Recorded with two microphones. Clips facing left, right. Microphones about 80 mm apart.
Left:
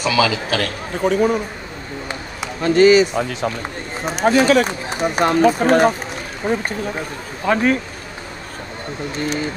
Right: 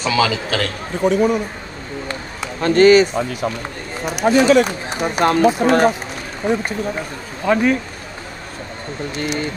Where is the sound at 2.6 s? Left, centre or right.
Right.